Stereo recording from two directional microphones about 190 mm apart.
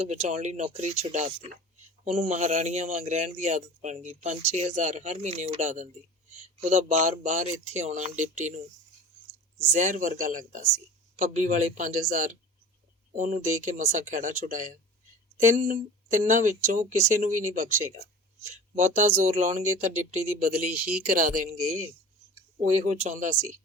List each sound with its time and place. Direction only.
0.1 s speech: 40° right (ahead or behind)
9.7 s speech: 40° right (ahead or behind)
22.5 s speech: 35° right (ahead or behind)